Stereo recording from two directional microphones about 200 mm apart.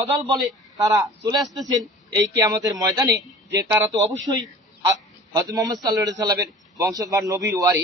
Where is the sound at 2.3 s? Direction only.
15° right (ahead or behind).